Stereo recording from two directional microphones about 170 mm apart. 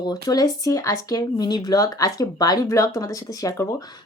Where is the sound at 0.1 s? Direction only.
20° left (ahead or behind).